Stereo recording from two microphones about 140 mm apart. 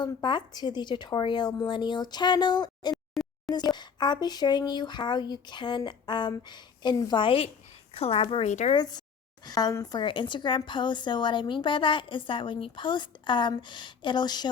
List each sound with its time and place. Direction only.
0.0 s speech: 35° left (ahead or behind)
2.9 s a sound: centre (ahead or behind)
3.5 s a woman's voice: 30° left (ahead or behind)
8.4 s speech: 55° left (ahead or behind)
8.7 s speech: 30° left (ahead or behind)